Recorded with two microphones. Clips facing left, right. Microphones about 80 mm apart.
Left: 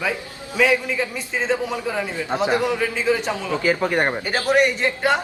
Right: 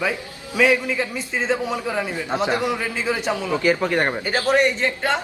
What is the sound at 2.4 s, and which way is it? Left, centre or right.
A man's voice, centre.